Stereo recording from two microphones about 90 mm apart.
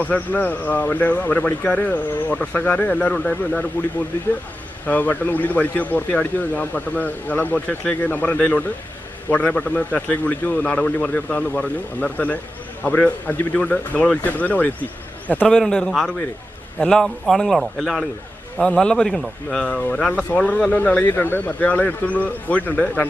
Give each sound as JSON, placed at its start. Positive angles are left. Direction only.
{"t": 0.0, "sound": "a man's voice", "side_deg": 15}
{"t": 4.9, "sound": "a man's voice", "side_deg": 15}
{"t": 15.4, "sound": "a man's voice", "side_deg": 5}
{"t": 18.6, "sound": "a man's voice", "side_deg": 10}